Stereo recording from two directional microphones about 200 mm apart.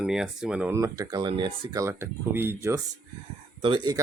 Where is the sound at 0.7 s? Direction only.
15° right (ahead or behind).